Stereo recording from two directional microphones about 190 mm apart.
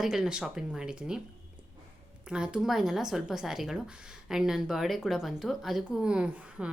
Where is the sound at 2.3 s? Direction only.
5° right (ahead or behind).